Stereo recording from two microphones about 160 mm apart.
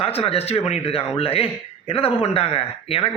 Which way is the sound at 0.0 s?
40° left (ahead or behind).